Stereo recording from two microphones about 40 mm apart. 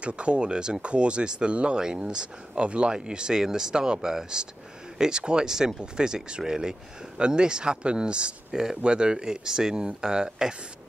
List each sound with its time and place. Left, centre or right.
0.0 s speech: right
8.5 s speech: centre